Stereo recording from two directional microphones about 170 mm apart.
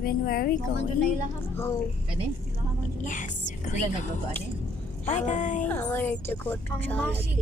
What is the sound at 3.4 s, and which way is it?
Music, 45° left (ahead or behind).